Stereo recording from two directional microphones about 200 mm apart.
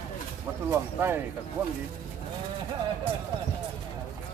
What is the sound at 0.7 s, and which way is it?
Speech, 10° right (ahead or behind).